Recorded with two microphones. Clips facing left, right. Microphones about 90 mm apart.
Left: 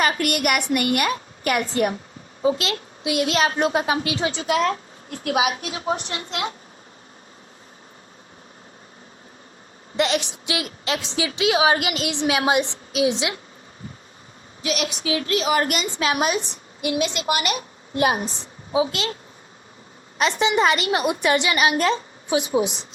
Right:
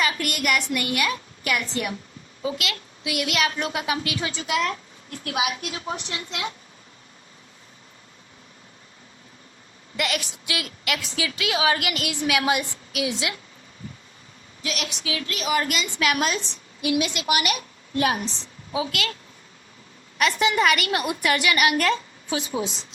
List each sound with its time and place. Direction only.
0.0 s a woman's voice: 50° left (ahead or behind)
2.4 s a woman's voice: 35° left (ahead or behind)
10.0 s a woman's voice: 25° left (ahead or behind)
14.7 s a woman's voice: 40° left (ahead or behind)
15.6 s a woman's voice: 40° left (ahead or behind); by 16.4 s 20° left (ahead or behind)
16.9 s a woman's voice: 35° left (ahead or behind)
18.3 s a woman's voice: 25° left (ahead or behind)
20.1 s a woman's voice: 25° left (ahead or behind)